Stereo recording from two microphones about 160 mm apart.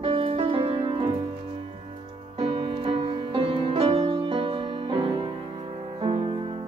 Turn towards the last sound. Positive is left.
turn(degrees=-30)  # may be behind; listen again after turning